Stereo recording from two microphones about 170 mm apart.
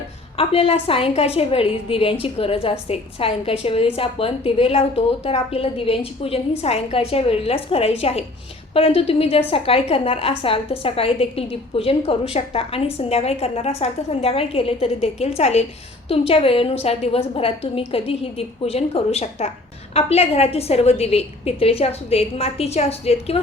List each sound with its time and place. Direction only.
0.3 s a woman's voice: 35° left (ahead or behind)